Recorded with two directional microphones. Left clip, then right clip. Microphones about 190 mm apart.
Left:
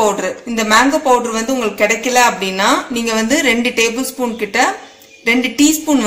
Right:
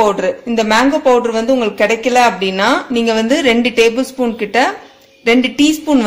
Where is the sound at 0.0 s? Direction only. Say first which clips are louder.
Right 2 dB; 50° right (ahead or behind).